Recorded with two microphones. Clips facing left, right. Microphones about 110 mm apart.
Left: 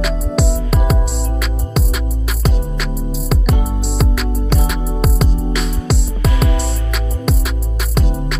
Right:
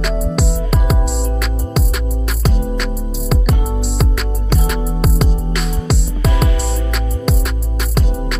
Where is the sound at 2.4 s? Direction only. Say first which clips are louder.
Right 2 dB; centre (ahead or behind).